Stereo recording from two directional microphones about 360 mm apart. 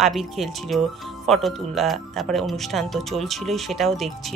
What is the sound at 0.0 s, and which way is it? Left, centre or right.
Speech, centre.